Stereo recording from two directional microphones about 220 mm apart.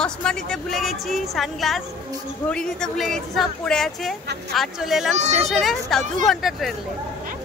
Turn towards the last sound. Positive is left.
turn(degrees=0)  # may be behind; listen again after turning